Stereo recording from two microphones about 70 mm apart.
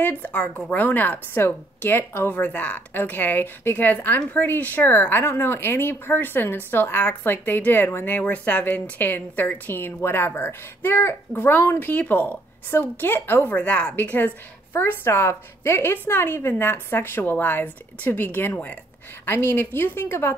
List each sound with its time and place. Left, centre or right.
0.0 s a woman's voice: left
13.4 s a woman's voice: left